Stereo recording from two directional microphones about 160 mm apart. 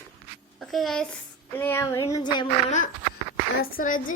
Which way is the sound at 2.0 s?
25° left (ahead or behind).